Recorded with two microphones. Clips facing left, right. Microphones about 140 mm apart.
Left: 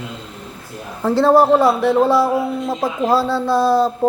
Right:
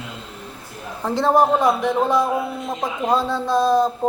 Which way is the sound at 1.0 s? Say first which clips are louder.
Left 5 dB; 15° right (ahead or behind).